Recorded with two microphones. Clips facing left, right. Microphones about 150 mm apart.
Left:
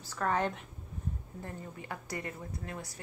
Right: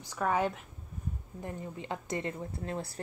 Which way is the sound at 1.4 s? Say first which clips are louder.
Right 5 dB; 20° right (ahead or behind).